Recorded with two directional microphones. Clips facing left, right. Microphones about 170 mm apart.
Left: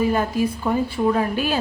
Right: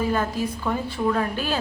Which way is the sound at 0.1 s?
15° left (ahead or behind).